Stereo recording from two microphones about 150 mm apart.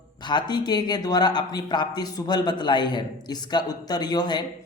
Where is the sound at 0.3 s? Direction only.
30° left (ahead or behind).